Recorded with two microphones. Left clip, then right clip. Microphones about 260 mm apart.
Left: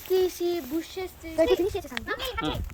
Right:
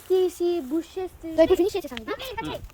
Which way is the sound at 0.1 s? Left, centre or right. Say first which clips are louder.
Right 3 dB; right.